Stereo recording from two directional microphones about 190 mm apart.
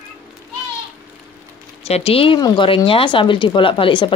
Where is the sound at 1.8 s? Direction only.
30° left (ahead or behind).